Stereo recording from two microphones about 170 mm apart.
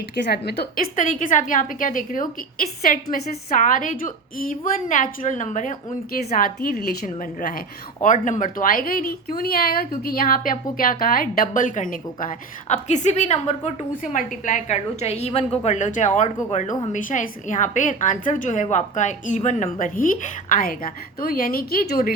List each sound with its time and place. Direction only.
0.3 s a woman's voice: 70° left (ahead or behind)
0.9 s a woman's voice: 50° left (ahead or behind)